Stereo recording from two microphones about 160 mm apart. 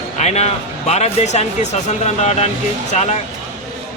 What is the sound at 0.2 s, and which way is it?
A man's voice, 45° left (ahead or behind).